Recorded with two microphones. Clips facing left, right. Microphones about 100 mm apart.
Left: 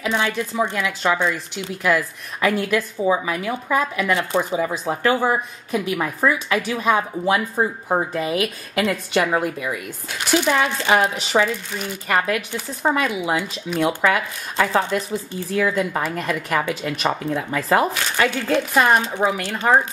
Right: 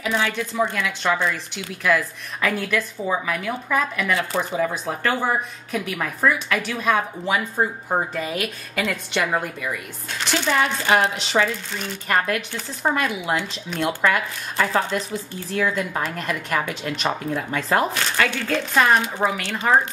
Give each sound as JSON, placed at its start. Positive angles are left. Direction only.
{"t": 0.1, "sound": "a woman's voice", "side_deg": 15}
{"t": 4.1, "sound": "speech", "side_deg": 20}
{"t": 4.4, "sound": "a woman's voice", "side_deg": 5}
{"t": 15.5, "sound": "a woman's voice", "side_deg": 5}
{"t": 18.1, "sound": "speech", "side_deg": 15}